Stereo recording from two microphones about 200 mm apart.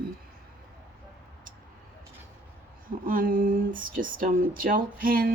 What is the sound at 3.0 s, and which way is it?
Speech, 45° right (ahead or behind).